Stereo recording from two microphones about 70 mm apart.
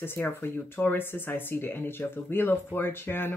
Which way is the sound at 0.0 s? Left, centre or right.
Left.